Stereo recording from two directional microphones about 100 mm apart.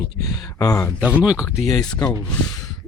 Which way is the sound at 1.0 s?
10° right (ahead or behind).